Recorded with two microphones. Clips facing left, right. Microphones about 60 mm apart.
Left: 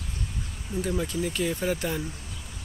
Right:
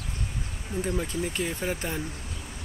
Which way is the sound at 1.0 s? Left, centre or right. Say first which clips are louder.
Left 2 dB; right.